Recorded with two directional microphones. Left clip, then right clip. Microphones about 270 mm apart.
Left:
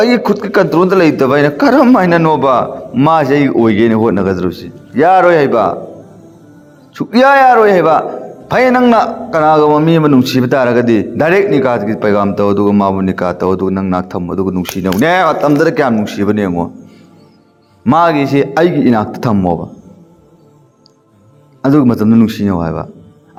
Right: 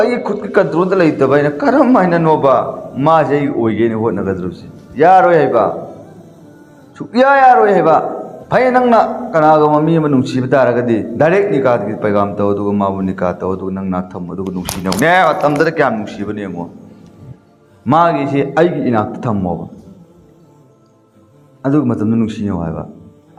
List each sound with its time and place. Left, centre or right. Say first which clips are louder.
0.0 s a man's voice: left 4 dB; left
6.9 s a man's voice: left 3 dB; left
17.8 s a man's voice: left 2 dB; left
21.6 s a man's voice: left 5 dB; left